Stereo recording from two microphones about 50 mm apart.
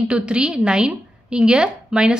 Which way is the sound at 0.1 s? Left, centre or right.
Right.